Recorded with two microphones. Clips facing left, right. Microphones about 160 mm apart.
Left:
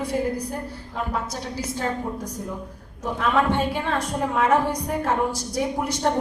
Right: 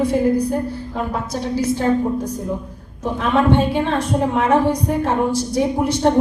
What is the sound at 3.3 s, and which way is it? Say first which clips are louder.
A woman's voice: right 7 dB; 25° right (ahead or behind).